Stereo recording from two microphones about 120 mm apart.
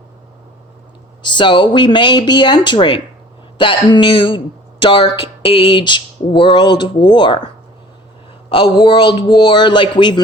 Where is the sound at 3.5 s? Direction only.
40° left (ahead or behind).